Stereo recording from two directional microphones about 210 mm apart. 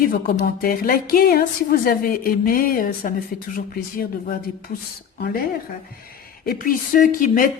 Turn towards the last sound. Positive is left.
turn(degrees=40)  # may be behind; listen again after turning